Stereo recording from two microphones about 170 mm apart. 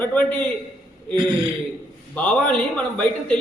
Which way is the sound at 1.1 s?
30° right (ahead or behind).